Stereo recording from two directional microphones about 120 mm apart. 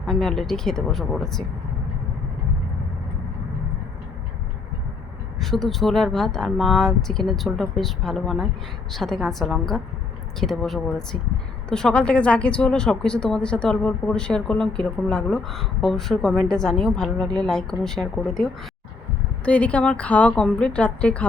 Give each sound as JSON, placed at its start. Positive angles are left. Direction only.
{"t": 0.0, "sound": "speech", "side_deg": 5}
{"t": 5.4, "sound": "speech", "side_deg": 0}